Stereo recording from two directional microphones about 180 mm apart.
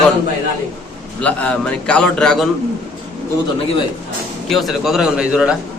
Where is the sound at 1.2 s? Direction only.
5° left (ahead or behind).